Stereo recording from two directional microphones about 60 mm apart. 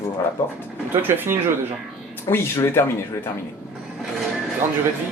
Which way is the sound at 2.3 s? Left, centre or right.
Left.